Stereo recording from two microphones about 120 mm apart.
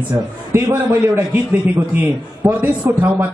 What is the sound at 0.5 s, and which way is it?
A man's voice, 20° right (ahead or behind).